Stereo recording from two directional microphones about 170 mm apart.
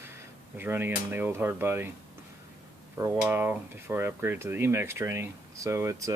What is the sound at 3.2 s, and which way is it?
Speech, 10° right (ahead or behind).